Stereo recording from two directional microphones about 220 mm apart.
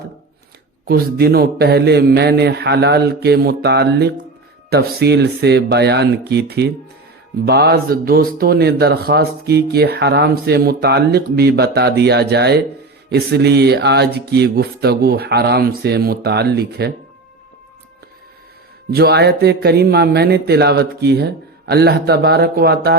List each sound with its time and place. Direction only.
0.9 s speech: 45° right (ahead or behind)
18.9 s speech: 45° right (ahead or behind)